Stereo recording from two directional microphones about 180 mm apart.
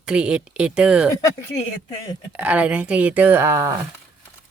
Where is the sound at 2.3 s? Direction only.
5° right (ahead or behind).